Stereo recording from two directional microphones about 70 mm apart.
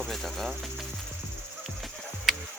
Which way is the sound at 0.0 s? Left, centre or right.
Centre.